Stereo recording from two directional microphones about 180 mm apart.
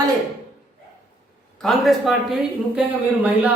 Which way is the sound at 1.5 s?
Centre (ahead or behind).